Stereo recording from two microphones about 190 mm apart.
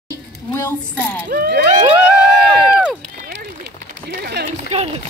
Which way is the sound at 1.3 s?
50° right (ahead or behind).